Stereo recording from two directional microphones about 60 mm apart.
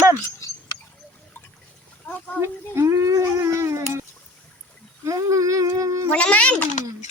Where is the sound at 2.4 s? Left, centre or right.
Right.